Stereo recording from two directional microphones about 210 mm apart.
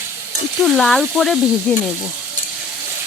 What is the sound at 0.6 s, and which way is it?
Speech, centre (ahead or behind).